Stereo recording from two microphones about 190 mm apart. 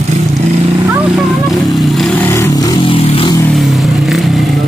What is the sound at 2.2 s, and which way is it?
Music, 15° left (ahead or behind).